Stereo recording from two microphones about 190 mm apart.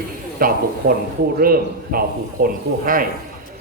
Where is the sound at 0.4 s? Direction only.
50° right (ahead or behind).